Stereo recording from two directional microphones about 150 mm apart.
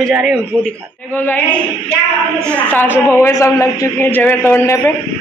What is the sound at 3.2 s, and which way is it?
A man's voice, 20° left (ahead or behind).